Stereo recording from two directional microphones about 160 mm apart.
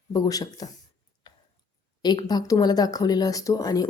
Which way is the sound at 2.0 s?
25° left (ahead or behind).